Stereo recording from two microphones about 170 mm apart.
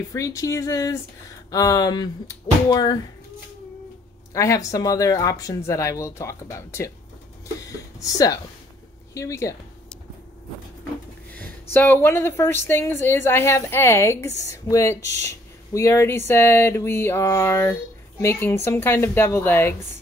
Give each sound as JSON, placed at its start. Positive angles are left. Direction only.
{"t": 0.1, "sound": "speech", "side_deg": 20}
{"t": 4.3, "sound": "speech", "side_deg": 20}
{"t": 8.0, "sound": "speech", "side_deg": 20}
{"t": 9.1, "sound": "mantra", "side_deg": 15}
{"t": 11.7, "sound": "mantra", "side_deg": 10}